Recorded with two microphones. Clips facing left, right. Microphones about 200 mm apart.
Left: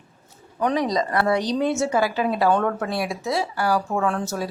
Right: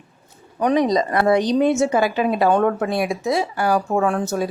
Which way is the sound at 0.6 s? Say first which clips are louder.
Right 4 dB; 20° right (ahead or behind).